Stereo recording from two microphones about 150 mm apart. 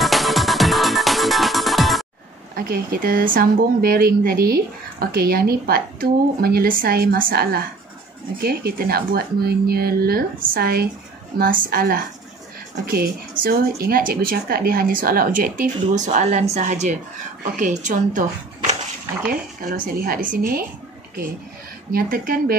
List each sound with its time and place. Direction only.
0.0 s music: centre (ahead or behind)
2.5 s speech: 70° right (ahead or behind); by 10.9 s 90° right
11.6 s speech: 75° right (ahead or behind); by 18.8 s 55° right (ahead or behind)
19.8 s speech: 65° right (ahead or behind)
21.9 s speech: 70° right (ahead or behind)